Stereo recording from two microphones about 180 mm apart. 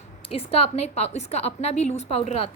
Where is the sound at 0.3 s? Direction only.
35° left (ahead or behind).